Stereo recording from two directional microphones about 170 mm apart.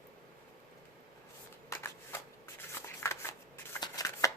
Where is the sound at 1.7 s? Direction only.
15° left (ahead or behind).